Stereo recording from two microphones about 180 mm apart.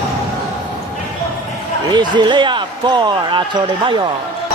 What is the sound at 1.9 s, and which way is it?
Speech, 25° right (ahead or behind).